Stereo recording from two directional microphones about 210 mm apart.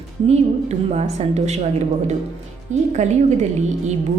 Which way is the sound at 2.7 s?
35° right (ahead or behind).